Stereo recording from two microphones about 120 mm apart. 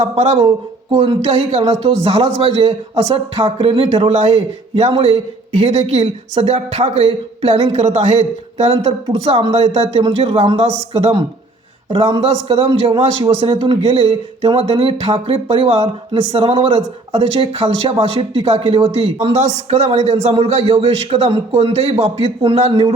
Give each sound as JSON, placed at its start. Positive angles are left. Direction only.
{"t": 0.0, "sound": "a man's voice", "side_deg": -60}
{"t": 3.8, "sound": "a man's voice", "side_deg": -65}